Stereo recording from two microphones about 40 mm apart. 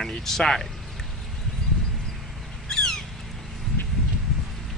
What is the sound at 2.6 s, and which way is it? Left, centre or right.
Cat, centre.